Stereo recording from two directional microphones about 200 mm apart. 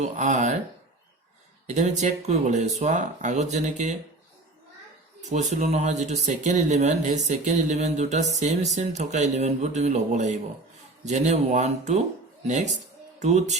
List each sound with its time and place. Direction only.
0.0 s speech: 35° right (ahead or behind)
1.6 s speech: 35° right (ahead or behind)
5.3 s speech: 35° right (ahead or behind)